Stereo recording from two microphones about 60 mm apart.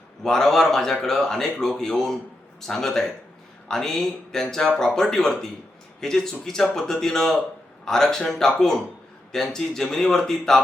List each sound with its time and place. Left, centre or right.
0.2 s a man's voice: centre